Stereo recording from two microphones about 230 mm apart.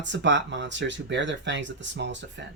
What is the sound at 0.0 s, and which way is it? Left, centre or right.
Speech, right.